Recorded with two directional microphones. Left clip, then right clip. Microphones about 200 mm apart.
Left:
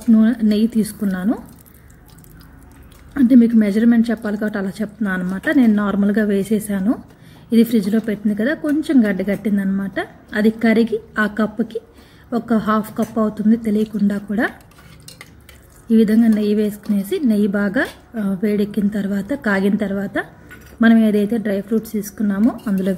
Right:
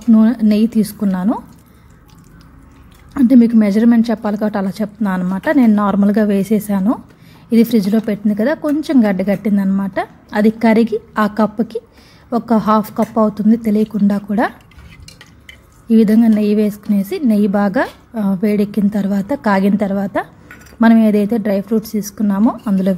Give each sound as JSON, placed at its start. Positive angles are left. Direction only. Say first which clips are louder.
{"t": 0.1, "sound": "a woman's voice", "louder": "right 3 dB", "side_deg": -30}
{"t": 3.2, "sound": "a woman's voice", "louder": "right 2 dB", "side_deg": -30}
{"t": 15.9, "sound": "a woman's voice", "louder": "right 3 dB", "side_deg": -30}